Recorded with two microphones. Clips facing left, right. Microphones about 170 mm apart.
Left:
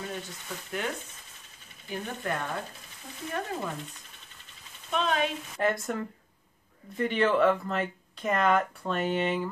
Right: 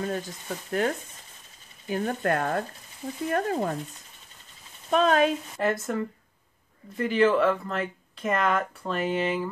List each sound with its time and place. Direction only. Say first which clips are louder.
0.0 s speech: right 7 dB; 45° right (ahead or behind)
1.9 s speech: right 7 dB; 55° right (ahead or behind)
4.9 s speech: right 7 dB; 45° right (ahead or behind)
5.6 s speech: even; centre (ahead or behind)